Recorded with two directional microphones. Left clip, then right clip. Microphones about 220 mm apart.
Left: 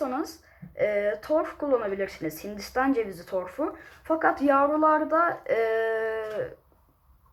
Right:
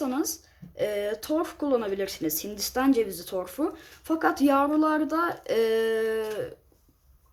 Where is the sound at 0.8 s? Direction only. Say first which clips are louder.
Left 3 dB; 55° right (ahead or behind).